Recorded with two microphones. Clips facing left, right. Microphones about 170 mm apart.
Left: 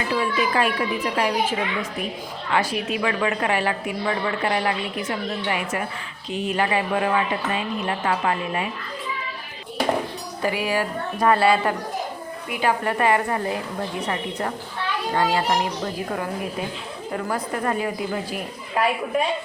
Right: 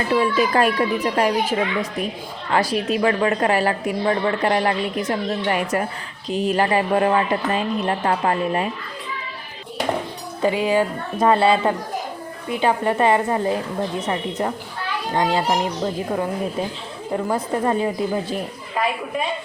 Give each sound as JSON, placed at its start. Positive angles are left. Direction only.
{"t": 0.1, "sound": "a woman's voice", "side_deg": -40}
{"t": 10.4, "sound": "a woman's voice", "side_deg": -20}
{"t": 17.1, "sound": "a woman's voice", "side_deg": -20}